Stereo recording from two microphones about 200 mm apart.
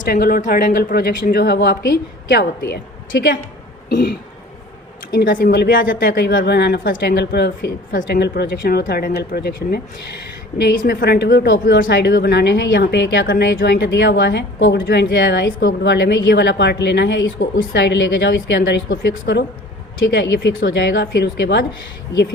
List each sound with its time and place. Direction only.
0.0 s a woman's voice: 50° left (ahead or behind)
5.2 s a woman's voice: 45° left (ahead or behind)
11.6 s a woman's voice: 45° left (ahead or behind)
11.9 s a woman's voice: 55° left (ahead or behind)
19.2 s a woman's voice: 55° left (ahead or behind)